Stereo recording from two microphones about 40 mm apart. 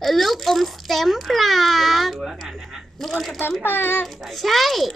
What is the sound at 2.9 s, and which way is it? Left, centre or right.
Speech, centre.